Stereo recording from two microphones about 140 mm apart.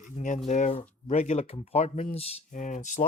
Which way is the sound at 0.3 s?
55° left (ahead or behind).